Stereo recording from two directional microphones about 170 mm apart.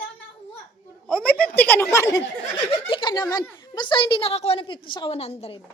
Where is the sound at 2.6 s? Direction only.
30° left (ahead or behind).